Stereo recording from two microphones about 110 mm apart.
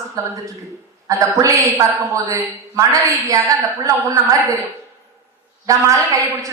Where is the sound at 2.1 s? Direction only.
30° right (ahead or behind).